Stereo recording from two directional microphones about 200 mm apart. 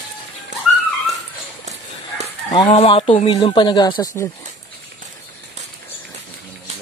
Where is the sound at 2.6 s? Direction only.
30° left (ahead or behind).